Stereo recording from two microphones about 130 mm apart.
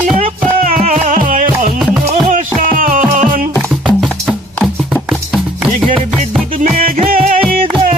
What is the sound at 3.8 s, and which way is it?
Music, 5° right (ahead or behind).